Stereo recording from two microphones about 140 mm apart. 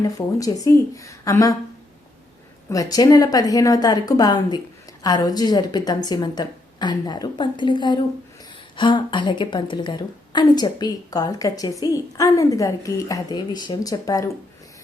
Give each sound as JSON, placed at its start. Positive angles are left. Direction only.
{"t": 0.0, "sound": "a woman's voice", "side_deg": 25}
{"t": 2.6, "sound": "a woman's voice", "side_deg": 25}